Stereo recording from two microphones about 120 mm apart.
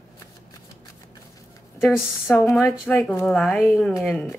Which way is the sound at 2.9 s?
15° left (ahead or behind).